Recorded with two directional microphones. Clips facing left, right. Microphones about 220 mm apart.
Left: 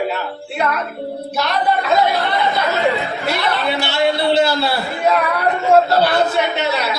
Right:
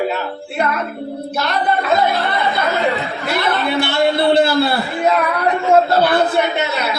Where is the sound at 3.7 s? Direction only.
55° right (ahead or behind).